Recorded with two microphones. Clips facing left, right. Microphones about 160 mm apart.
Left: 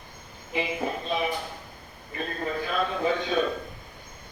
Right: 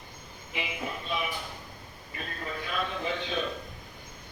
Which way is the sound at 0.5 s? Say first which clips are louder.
Left 7 dB; 35° left (ahead or behind).